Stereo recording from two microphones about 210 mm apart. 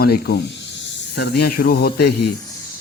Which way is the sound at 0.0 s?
50° left (ahead or behind).